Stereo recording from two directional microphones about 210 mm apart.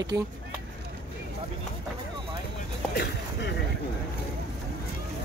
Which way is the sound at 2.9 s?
50° left (ahead or behind).